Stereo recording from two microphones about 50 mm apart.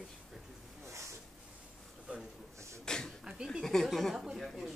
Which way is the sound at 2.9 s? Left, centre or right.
Centre.